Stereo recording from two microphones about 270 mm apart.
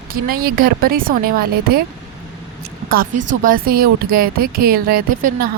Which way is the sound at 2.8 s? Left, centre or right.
Right.